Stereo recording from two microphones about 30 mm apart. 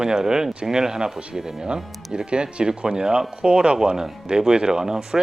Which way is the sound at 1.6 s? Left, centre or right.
Right.